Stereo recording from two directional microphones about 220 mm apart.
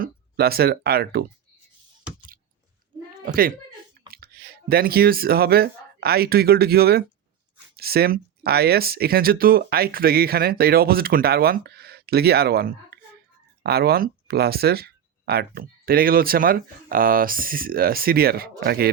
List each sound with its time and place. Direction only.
0.0 s speech: 45° right (ahead or behind)
3.2 s speech: 40° right (ahead or behind)